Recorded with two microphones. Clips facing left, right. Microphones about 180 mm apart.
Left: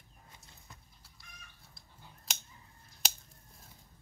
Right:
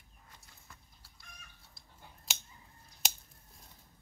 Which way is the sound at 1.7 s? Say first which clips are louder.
Right 1 dB; centre (ahead or behind).